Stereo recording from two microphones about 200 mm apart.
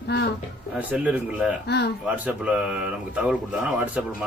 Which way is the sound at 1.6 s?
55° left (ahead or behind).